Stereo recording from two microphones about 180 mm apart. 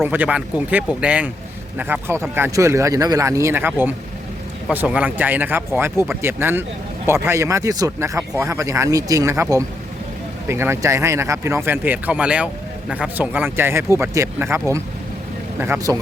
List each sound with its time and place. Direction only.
0.0 s speech: 10° right (ahead or behind)
15.6 s speech: 15° right (ahead or behind)